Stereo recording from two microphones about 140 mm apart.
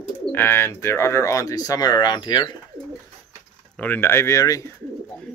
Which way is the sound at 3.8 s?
15° left (ahead or behind).